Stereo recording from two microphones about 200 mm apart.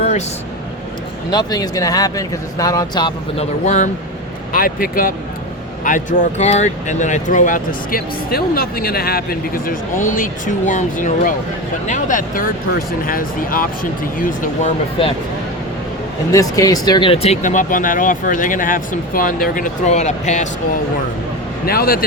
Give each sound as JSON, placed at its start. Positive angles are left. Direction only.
{"t": 1.3, "sound": "speech", "side_deg": 20}
{"t": 4.5, "sound": "speech", "side_deg": 45}
{"t": 15.0, "sound": "speech", "side_deg": 25}
{"t": 16.3, "sound": "speech", "side_deg": 15}
{"t": 21.7, "sound": "speech", "side_deg": 50}